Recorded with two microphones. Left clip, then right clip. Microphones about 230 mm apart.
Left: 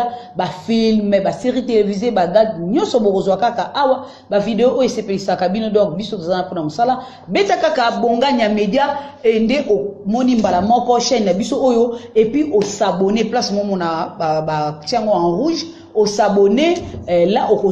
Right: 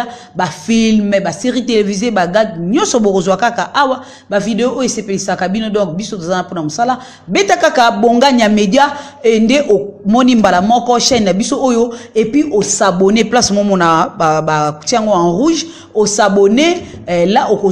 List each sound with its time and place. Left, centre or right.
0.4 s a man's voice: right
2.9 s speech: right
3.3 s a man's voice: right